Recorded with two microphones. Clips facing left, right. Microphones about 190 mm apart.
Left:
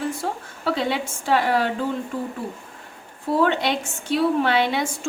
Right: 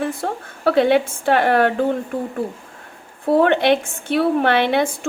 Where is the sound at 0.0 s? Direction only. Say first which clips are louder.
Right 3 dB; 60° right (ahead or behind).